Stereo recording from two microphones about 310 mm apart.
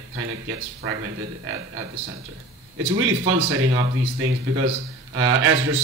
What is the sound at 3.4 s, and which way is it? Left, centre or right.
Speech, right.